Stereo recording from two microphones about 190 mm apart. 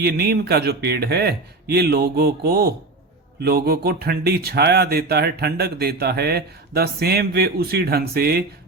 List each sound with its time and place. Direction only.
0.0 s speech: 55° right (ahead or behind)